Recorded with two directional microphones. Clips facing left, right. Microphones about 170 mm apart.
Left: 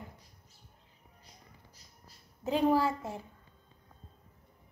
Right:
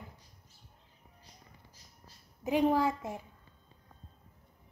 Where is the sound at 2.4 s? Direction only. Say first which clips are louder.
Even; 15° right (ahead or behind).